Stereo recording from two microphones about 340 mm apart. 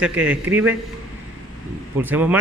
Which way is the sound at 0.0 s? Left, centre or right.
Centre.